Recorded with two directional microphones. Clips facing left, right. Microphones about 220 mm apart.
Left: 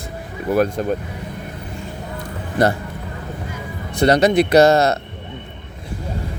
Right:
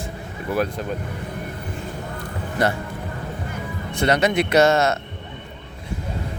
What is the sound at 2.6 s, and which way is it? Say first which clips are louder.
Speech: left 5 dB; 35° left (ahead or behind).